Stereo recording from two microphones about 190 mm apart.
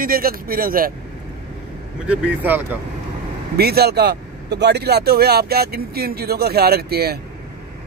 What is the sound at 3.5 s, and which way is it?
Speech, 55° right (ahead or behind).